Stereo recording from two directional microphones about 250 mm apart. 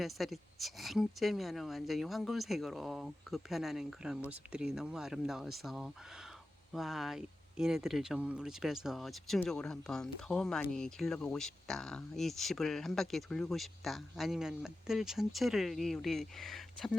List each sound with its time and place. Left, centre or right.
0.0 s speech: centre